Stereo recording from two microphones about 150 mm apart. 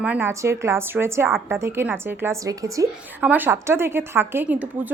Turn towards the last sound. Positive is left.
turn(degrees=-10)  # may be behind; listen again after turning